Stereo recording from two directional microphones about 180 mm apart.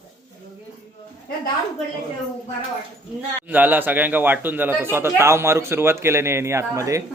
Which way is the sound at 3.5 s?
10° right (ahead or behind).